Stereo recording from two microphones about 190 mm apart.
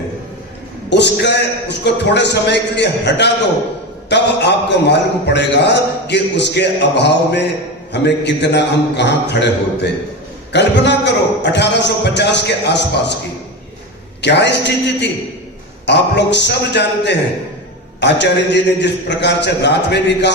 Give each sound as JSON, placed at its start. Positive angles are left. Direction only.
{"t": 0.9, "sound": "a man's voice", "side_deg": 65}
{"t": 14.2, "sound": "a man's voice", "side_deg": 65}